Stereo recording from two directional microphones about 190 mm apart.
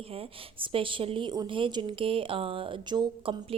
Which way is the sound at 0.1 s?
30° right (ahead or behind).